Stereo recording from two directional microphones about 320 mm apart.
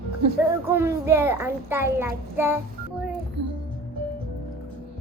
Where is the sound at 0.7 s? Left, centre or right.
Centre.